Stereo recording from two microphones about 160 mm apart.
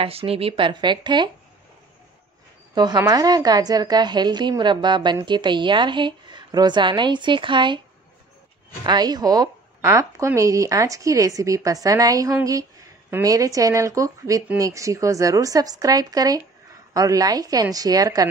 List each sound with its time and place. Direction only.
0.0 s speech: 35° right (ahead or behind)
2.7 s a woman's voice: 25° right (ahead or behind)
8.8 s a woman's voice: 25° right (ahead or behind)